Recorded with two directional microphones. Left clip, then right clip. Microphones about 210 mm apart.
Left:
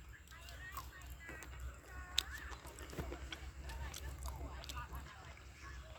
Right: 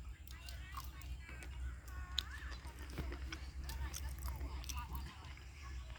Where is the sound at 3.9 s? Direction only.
15° left (ahead or behind).